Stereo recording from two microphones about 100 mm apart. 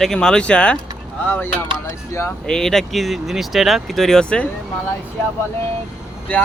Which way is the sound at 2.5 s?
5° left (ahead or behind).